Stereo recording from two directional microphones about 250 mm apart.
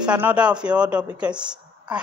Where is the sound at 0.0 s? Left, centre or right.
Centre.